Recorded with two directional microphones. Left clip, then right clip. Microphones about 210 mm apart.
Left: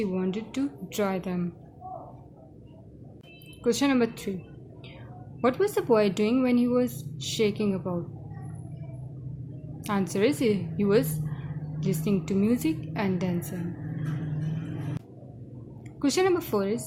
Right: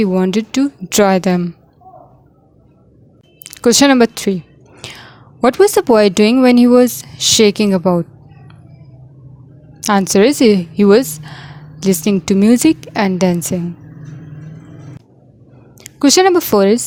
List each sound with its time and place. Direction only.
0.0 s speech: 45° right (ahead or behind)
3.6 s speech: 45° right (ahead or behind)
5.4 s speech: 45° right (ahead or behind)
9.8 s speech: 45° right (ahead or behind)
15.8 s speech: 45° right (ahead or behind)